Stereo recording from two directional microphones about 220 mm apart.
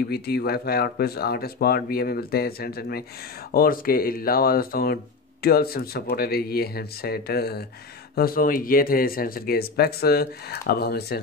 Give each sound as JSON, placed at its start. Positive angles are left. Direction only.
{"t": 0.1, "sound": "speech", "side_deg": 45}